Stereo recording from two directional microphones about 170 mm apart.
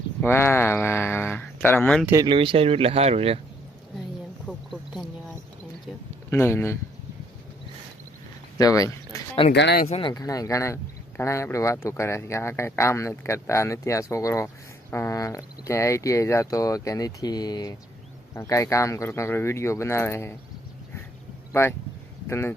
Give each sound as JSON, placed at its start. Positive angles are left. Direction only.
{"t": 0.2, "sound": "speech", "side_deg": 15}
{"t": 2.2, "sound": "speech", "side_deg": -30}
{"t": 4.5, "sound": "a sound", "side_deg": -10}
{"t": 6.3, "sound": "speech", "side_deg": 15}
{"t": 8.5, "sound": "speech", "side_deg": 20}
{"t": 9.5, "sound": "speech", "side_deg": 80}
{"t": 9.8, "sound": "speech", "side_deg": 35}
{"t": 10.1, "sound": "speech", "side_deg": 20}
{"t": 21.5, "sound": "speech", "side_deg": 15}